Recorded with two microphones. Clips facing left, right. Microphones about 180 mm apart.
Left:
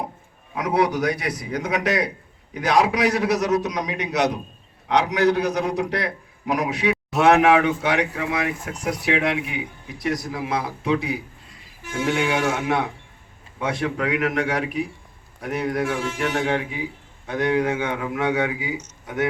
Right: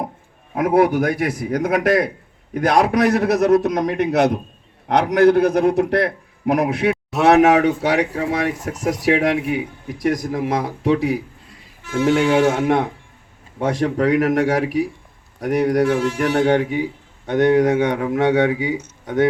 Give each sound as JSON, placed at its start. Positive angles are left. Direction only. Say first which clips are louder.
{"t": 0.5, "sound": "a man's voice", "louder": "right 6 dB", "side_deg": -50}
{"t": 6.9, "sound": "a sound", "louder": "right 1 dB", "side_deg": 0}
{"t": 7.3, "sound": "speech", "louder": "right 4 dB", "side_deg": -40}